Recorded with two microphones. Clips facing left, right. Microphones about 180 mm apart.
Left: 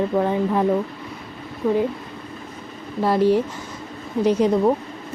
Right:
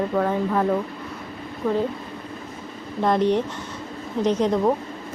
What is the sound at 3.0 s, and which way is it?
Speech, 5° left (ahead or behind).